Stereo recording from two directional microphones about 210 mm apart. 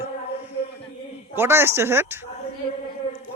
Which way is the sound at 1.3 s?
10° right (ahead or behind).